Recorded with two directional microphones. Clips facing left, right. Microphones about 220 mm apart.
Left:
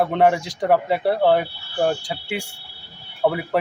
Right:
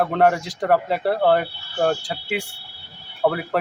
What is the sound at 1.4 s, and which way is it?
Speech, 10° left (ahead or behind).